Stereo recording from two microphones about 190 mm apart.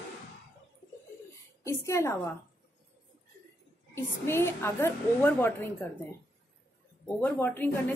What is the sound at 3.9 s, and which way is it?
A woman's voice, 15° left (ahead or behind).